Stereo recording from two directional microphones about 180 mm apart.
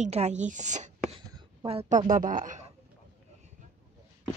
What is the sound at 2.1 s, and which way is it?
Speech, 50° right (ahead or behind).